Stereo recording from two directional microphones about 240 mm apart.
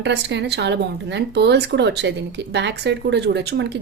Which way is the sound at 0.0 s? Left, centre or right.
Right.